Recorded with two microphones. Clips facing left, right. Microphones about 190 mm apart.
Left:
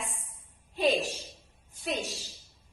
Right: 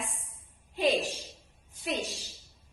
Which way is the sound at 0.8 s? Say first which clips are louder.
Even; 15° right (ahead or behind).